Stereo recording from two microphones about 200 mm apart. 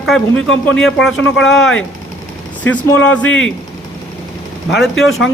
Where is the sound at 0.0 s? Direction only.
Centre (ahead or behind).